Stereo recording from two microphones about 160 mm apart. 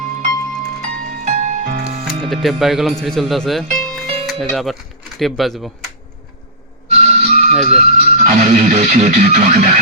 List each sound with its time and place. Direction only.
1.2 s music: 50° right (ahead or behind)
2.2 s speech: centre (ahead or behind)
6.9 s speech: 45° right (ahead or behind)